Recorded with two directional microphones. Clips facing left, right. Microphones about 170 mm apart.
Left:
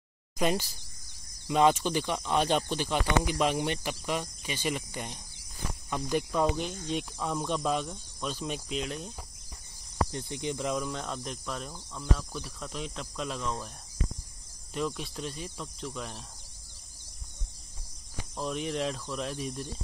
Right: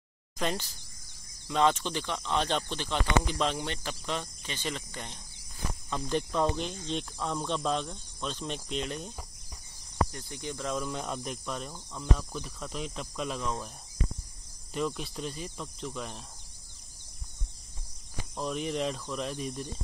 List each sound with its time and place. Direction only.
0.4 s speech: 10° left (ahead or behind)
10.1 s speech: 20° left (ahead or behind)
10.8 s speech: 5° right (ahead or behind)
14.7 s speech: centre (ahead or behind)
18.3 s speech: centre (ahead or behind)